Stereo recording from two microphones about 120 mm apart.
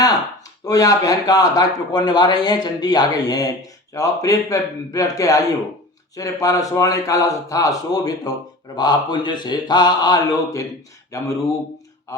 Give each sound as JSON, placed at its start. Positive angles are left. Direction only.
{"t": 0.6, "sound": "speech", "side_deg": 30}